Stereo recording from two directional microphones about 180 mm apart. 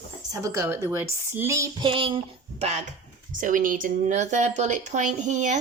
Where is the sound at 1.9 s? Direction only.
30° right (ahead or behind).